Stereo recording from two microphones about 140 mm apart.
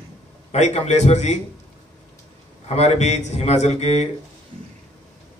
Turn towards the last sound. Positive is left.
turn(degrees=50)  # may be behind; listen again after turning